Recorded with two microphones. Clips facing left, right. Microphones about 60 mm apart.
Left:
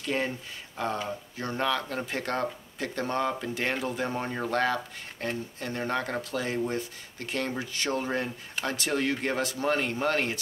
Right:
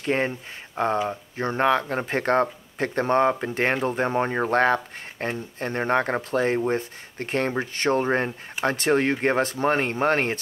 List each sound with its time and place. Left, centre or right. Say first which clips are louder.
0.0 s speech: right 5 dB; right